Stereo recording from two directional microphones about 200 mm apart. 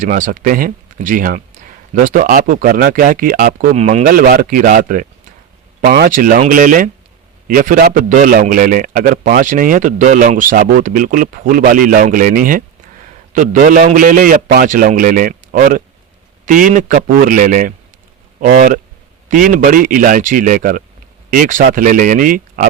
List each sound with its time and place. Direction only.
0.0 s a man's voice: 40° right (ahead or behind)